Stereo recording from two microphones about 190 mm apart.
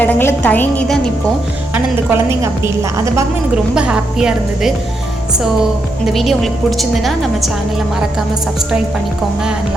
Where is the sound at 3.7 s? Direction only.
5° right (ahead or behind).